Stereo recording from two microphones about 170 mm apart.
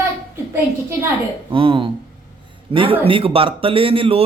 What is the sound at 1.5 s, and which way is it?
Speech, 30° right (ahead or behind).